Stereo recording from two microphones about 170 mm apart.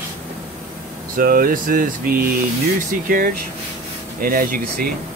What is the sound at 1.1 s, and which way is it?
Speech, 60° right (ahead or behind).